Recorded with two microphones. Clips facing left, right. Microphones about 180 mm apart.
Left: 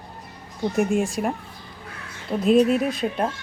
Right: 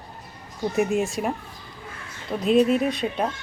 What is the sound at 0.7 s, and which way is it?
Speech, centre (ahead or behind).